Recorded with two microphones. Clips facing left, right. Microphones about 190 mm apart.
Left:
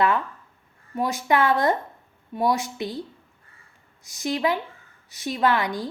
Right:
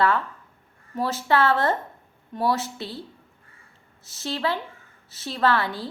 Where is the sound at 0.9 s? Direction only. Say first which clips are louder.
Even; 15° left (ahead or behind).